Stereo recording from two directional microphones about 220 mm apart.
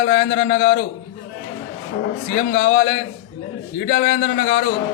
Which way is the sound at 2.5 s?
45° left (ahead or behind).